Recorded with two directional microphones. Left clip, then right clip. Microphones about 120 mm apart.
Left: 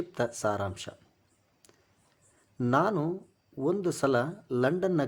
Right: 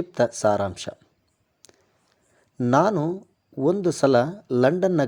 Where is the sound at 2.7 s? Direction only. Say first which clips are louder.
Right 7 dB; 45° right (ahead or behind).